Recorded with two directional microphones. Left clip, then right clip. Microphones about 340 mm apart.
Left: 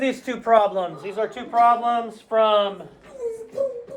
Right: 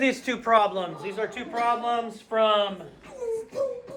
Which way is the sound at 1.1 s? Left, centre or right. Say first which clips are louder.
Left 10 dB; centre.